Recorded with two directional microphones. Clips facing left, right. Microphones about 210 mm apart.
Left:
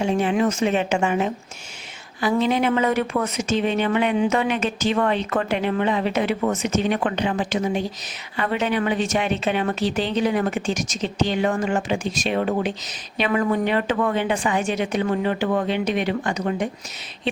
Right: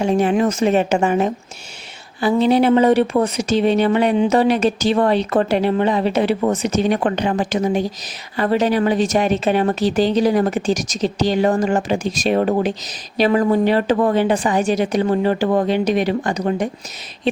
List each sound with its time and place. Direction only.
0.0 s speech: 45° right (ahead or behind)